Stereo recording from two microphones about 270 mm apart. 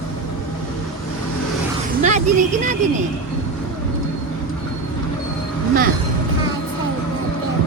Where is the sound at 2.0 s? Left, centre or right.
Right.